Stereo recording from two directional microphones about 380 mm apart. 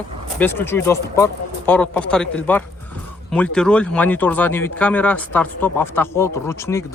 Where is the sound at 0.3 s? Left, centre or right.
Centre.